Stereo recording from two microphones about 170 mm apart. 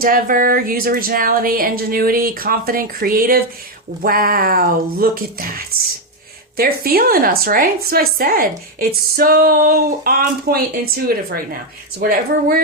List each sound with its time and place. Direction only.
0.0 s a woman's voice: 55° right (ahead or behind)
11.9 s a woman's voice: 60° right (ahead or behind)